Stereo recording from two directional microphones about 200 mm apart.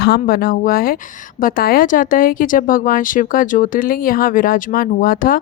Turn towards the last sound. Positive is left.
turn(degrees=45)  # may be behind; listen again after turning